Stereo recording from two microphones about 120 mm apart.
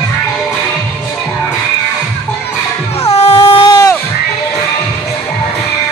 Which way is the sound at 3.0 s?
60° left (ahead or behind).